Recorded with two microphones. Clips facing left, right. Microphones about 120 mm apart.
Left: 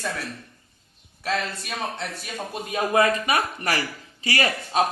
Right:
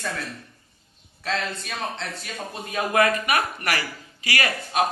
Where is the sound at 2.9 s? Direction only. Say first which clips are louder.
Even; 25° left (ahead or behind).